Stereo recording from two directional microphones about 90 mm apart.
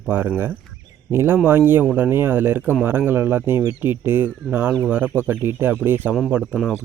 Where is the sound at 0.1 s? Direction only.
20° right (ahead or behind).